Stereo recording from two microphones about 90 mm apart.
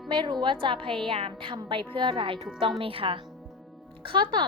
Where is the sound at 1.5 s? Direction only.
65° right (ahead or behind).